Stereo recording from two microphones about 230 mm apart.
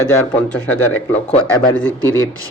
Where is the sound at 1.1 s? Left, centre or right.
Left.